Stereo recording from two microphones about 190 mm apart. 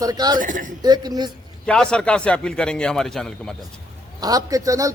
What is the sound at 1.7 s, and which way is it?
A man's voice, 5° left (ahead or behind).